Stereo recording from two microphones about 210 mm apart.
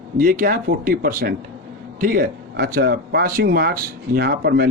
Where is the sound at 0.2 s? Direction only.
40° right (ahead or behind).